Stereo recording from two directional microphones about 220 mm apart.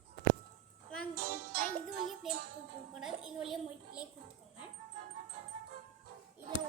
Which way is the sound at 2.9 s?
Centre (ahead or behind).